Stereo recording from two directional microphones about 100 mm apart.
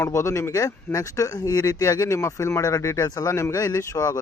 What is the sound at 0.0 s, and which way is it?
Speech, 30° left (ahead or behind).